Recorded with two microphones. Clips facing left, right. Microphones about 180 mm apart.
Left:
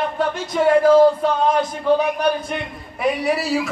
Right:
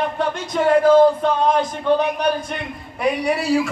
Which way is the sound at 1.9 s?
5° left (ahead or behind).